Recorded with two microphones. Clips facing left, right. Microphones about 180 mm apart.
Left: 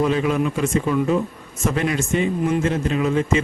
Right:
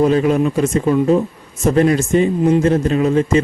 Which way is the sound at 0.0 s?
40° right (ahead or behind).